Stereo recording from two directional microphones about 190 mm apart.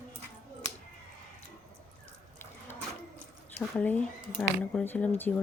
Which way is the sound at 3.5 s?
10° left (ahead or behind).